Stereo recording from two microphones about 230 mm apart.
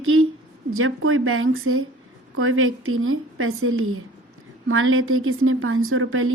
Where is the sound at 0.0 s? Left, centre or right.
Right.